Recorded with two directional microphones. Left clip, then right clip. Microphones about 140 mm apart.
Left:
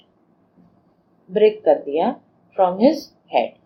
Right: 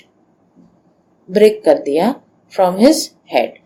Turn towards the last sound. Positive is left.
turn(degrees=-55)  # may be behind; listen again after turning